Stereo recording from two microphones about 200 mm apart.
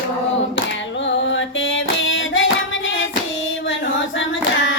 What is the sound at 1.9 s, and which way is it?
Singing, 70° left (ahead or behind).